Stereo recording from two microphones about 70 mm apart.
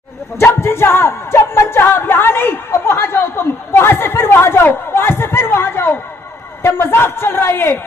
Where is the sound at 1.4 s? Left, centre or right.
Left.